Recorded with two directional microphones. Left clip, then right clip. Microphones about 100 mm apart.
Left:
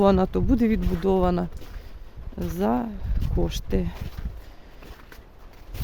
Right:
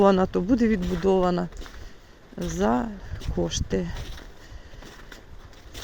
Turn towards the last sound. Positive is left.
turn(degrees=50)  # may be behind; listen again after turning